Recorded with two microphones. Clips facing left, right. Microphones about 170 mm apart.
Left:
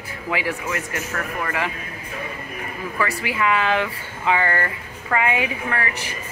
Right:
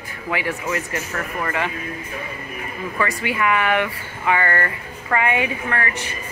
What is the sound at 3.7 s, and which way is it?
Speech, 15° left (ahead or behind).